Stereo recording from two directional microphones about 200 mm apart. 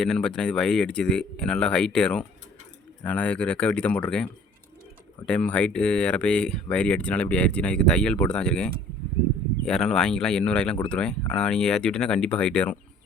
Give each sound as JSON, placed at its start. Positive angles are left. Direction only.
{"t": 0.0, "sound": "speech", "side_deg": 5}